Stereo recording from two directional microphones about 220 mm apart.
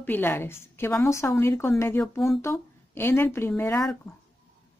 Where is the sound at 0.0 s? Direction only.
10° left (ahead or behind).